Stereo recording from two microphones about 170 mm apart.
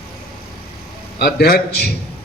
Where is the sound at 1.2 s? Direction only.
65° left (ahead or behind).